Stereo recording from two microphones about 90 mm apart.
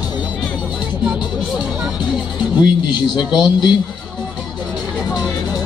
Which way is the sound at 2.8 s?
55° left (ahead or behind).